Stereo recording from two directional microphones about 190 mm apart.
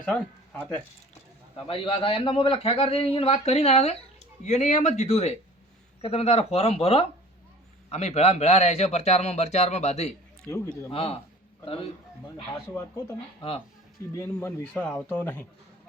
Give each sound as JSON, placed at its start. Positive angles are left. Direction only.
{"t": 0.0, "sound": "speech", "side_deg": 5}
{"t": 1.5, "sound": "a man's voice", "side_deg": 30}
{"t": 12.7, "sound": "speech", "side_deg": 15}
{"t": 14.3, "sound": "speech", "side_deg": 10}